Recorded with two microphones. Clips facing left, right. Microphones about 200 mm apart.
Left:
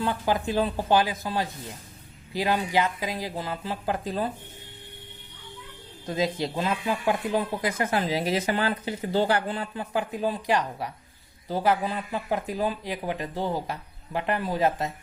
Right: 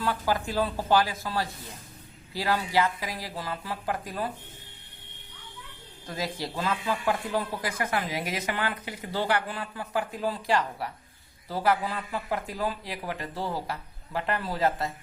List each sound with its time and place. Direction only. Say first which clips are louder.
0.0 s speech: left 2 dB; 20° left (ahead or behind)
6.1 s speech: left 6 dB; 20° left (ahead or behind)